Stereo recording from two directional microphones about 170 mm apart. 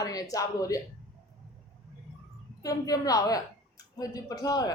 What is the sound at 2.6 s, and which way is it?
Speech, 20° left (ahead or behind).